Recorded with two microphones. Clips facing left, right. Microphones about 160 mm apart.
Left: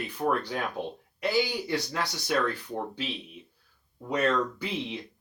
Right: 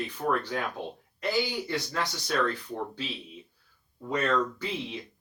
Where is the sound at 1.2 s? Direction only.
15° left (ahead or behind).